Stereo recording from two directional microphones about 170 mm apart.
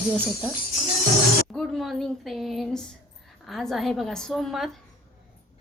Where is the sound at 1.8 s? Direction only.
Centre (ahead or behind).